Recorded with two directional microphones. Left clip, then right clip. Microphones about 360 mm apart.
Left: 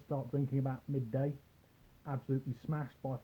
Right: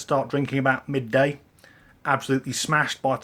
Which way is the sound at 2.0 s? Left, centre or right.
Centre.